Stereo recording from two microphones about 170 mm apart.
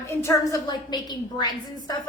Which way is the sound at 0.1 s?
15° left (ahead or behind).